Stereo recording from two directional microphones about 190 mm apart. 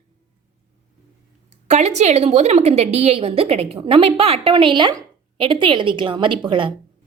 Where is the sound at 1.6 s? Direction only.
35° right (ahead or behind).